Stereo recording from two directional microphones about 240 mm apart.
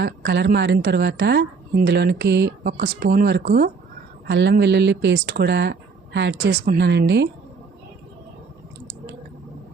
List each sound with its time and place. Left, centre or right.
0.0 s a woman's voice: right